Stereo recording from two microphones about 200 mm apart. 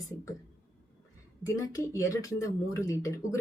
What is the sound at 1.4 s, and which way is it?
Speech, 15° left (ahead or behind).